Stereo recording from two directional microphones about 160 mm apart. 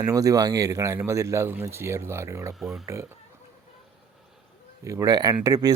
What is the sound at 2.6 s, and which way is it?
Speech, 5° right (ahead or behind).